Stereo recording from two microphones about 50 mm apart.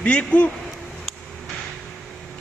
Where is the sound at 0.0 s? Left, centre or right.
Left.